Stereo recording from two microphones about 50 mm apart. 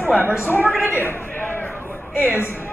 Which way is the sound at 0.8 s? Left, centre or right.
Left.